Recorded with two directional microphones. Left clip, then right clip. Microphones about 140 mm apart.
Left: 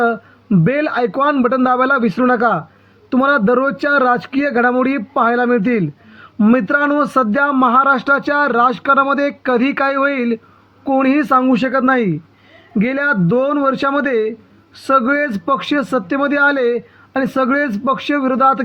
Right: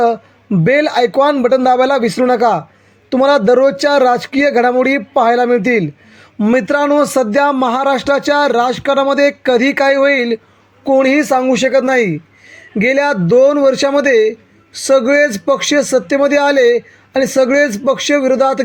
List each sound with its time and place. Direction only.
0.6 s a man's voice: 45° right (ahead or behind)